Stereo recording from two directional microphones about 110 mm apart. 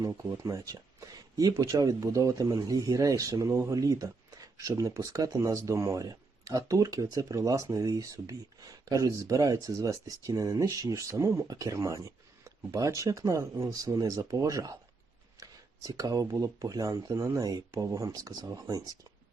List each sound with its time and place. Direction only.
0.3 s speech: 30° right (ahead or behind)